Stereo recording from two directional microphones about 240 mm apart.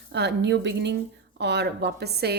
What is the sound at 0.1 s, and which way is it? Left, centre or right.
A woman's voice, right.